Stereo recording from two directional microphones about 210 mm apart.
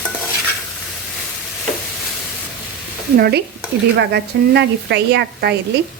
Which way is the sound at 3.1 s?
50° right (ahead or behind).